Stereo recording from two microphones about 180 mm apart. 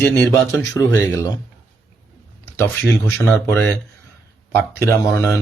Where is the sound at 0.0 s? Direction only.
10° left (ahead or behind).